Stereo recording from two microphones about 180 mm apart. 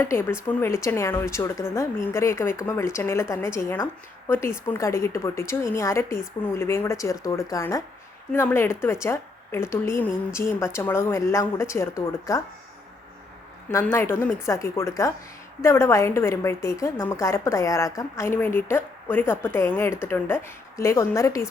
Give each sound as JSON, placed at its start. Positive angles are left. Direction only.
{"t": 0.0, "sound": "a woman's voice", "side_deg": 15}
{"t": 13.7, "sound": "a woman's voice", "side_deg": 15}